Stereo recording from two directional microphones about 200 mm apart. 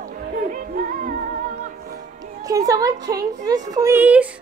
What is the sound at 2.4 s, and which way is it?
A woman's voice, 20° right (ahead or behind).